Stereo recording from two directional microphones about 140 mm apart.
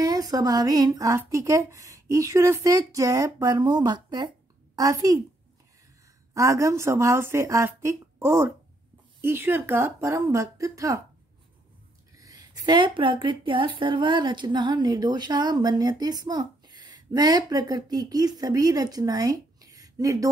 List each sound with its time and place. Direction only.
0.0 s a woman's voice: 25° right (ahead or behind)
6.3 s a woman's voice: 20° right (ahead or behind)
12.2 s a woman's voice: 25° right (ahead or behind)